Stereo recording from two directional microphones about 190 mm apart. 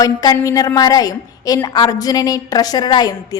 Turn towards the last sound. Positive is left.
turn(degrees=20)  # may be behind; listen again after turning